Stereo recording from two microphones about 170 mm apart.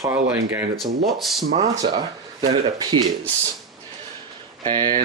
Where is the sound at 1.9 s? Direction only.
35° right (ahead or behind).